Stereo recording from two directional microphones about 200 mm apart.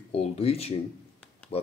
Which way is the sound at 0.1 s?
30° left (ahead or behind).